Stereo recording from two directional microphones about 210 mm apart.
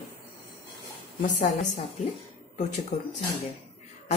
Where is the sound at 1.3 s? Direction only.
35° left (ahead or behind).